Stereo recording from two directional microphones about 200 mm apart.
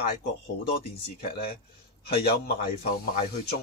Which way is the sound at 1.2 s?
50° left (ahead or behind).